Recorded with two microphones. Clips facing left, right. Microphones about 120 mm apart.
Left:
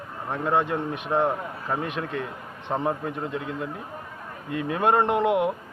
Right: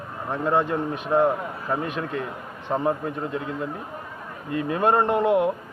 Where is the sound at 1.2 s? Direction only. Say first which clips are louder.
Right 3 dB; 10° right (ahead or behind).